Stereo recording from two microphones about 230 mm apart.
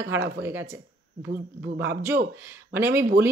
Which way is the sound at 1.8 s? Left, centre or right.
Centre.